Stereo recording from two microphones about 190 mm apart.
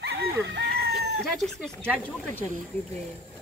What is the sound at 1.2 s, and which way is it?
Speech, centre (ahead or behind).